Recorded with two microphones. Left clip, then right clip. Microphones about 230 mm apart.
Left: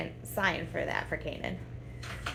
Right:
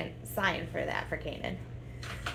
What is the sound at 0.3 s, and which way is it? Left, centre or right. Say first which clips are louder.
A woman's voice: left 1 dB; left.